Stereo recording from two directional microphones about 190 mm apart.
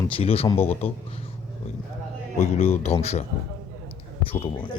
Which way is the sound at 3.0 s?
35° left (ahead or behind).